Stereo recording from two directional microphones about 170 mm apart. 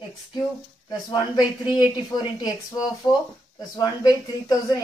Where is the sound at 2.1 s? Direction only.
25° left (ahead or behind).